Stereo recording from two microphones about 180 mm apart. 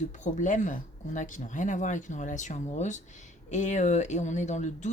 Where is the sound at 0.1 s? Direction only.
45° left (ahead or behind).